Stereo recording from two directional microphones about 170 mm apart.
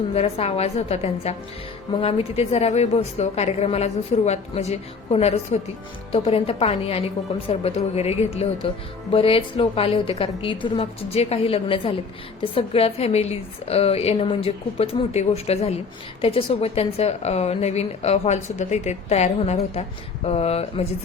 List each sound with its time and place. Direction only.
0.1 s a woman's voice: 35° left (ahead or behind)